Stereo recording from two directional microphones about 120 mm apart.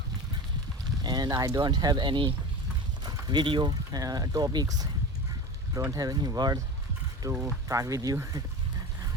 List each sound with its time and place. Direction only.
1.0 s speech: 35° right (ahead or behind)